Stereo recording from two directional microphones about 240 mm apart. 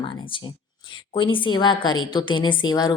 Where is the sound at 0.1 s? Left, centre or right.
Left.